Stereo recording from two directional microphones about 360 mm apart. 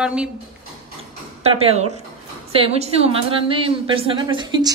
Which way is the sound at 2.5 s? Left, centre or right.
Centre.